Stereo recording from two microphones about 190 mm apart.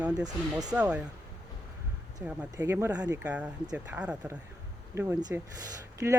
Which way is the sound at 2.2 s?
10° right (ahead or behind).